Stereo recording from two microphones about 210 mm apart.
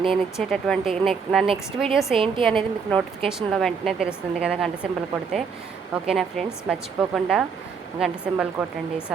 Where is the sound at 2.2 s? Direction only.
25° right (ahead or behind).